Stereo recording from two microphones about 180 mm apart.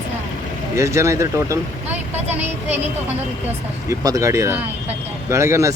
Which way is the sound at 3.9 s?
20° right (ahead or behind).